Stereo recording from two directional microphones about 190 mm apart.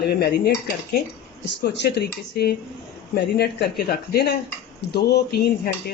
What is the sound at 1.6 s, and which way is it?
Speech, 60° left (ahead or behind).